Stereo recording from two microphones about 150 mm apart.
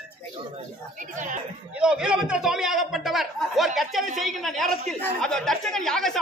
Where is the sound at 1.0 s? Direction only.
60° right (ahead or behind).